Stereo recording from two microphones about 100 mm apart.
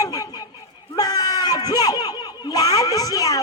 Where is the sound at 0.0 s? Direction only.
40° left (ahead or behind).